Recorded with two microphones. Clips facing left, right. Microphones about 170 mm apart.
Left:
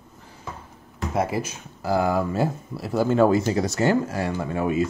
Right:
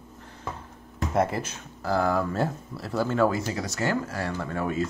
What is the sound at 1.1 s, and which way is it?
Speech, 5° left (ahead or behind).